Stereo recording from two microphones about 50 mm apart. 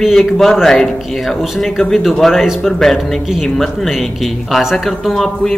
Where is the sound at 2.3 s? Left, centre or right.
Centre.